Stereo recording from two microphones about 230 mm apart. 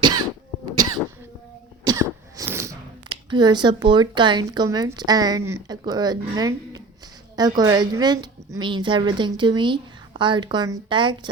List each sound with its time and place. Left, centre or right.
1.9 s a woman's voice: centre